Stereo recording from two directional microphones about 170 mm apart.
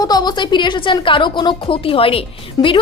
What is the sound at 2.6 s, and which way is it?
Speech, 20° left (ahead or behind).